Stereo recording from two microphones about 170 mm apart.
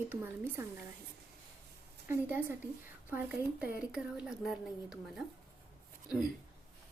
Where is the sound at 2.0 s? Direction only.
10° right (ahead or behind).